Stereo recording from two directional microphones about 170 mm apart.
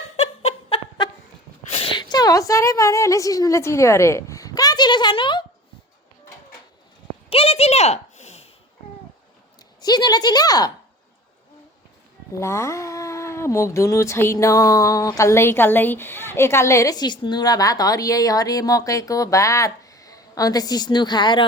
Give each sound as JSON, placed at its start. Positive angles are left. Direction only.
{"t": 0.2, "sound": "snicker", "side_deg": 35}
{"t": 1.6, "sound": "a woman's voice", "side_deg": 35}
{"t": 7.3, "sound": "a sound", "side_deg": 35}
{"t": 9.8, "sound": "speech", "side_deg": 25}
{"t": 12.4, "sound": "speech", "side_deg": 15}